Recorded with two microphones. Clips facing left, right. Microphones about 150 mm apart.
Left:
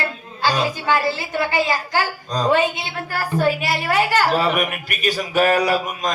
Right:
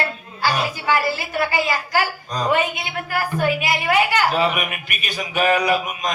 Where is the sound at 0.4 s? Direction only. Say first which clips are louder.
Left 1 dB; 20° left (ahead or behind).